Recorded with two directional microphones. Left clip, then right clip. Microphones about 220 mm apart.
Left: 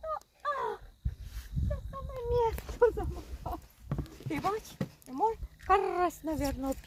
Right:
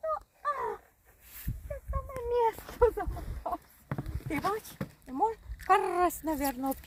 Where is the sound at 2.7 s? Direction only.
40° right (ahead or behind).